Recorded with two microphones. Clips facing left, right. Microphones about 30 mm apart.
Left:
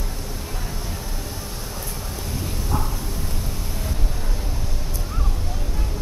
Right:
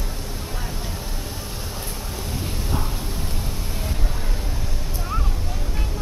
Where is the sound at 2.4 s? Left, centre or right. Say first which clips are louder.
Left 2 dB; centre.